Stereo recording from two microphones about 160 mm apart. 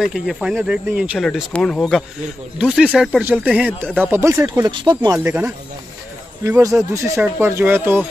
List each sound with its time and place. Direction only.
0.0 s speech: 5° right (ahead or behind)
1.2 s speech: 5° left (ahead or behind); by 8.1 s 15° right (ahead or behind)